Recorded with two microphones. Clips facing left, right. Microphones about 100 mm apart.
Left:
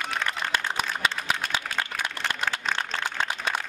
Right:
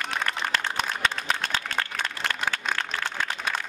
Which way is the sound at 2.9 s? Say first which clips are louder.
Left 1 dB; 30° left (ahead or behind).